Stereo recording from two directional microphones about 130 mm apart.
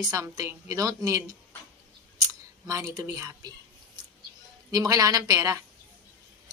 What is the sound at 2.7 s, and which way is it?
Speech, 25° right (ahead or behind).